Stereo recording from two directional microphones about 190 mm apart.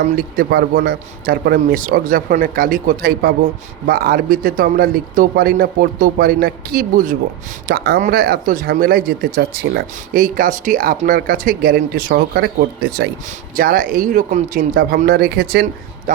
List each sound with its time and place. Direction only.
0.0 s a man's voice: 50° right (ahead or behind)